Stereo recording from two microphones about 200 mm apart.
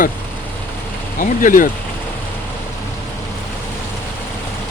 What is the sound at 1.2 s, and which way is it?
Speech, 40° left (ahead or behind).